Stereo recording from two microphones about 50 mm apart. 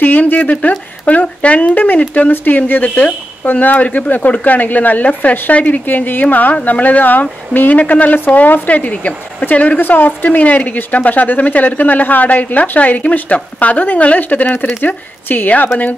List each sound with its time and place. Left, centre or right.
0.0 s speech: left
6.2 s speech: left
9.8 s speech: left